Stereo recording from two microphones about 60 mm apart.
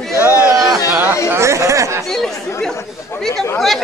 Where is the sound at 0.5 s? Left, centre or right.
Right.